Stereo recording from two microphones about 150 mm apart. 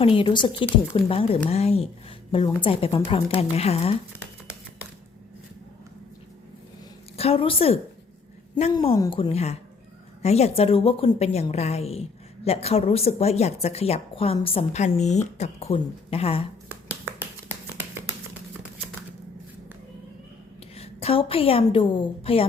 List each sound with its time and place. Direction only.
0.0 s a woman's voice: 35° left (ahead or behind)
7.2 s a woman's voice: 40° left (ahead or behind)
9.0 s a woman's voice: 30° left (ahead or behind)
16.9 s finger snapping: 10° right (ahead or behind)
20.7 s a woman's voice: 40° left (ahead or behind)